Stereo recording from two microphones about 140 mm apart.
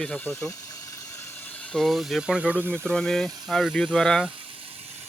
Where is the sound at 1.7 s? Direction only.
5° left (ahead or behind).